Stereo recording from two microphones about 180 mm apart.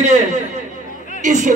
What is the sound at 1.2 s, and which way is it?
Speech, 45° right (ahead or behind).